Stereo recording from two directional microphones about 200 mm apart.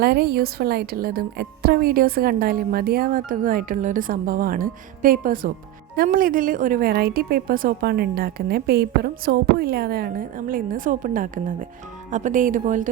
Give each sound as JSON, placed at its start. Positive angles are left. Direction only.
{"t": 0.0, "sound": "a woman's voice", "side_deg": -50}